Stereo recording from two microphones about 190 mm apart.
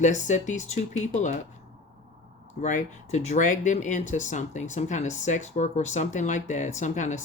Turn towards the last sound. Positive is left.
turn(degrees=40)  # may be behind; listen again after turning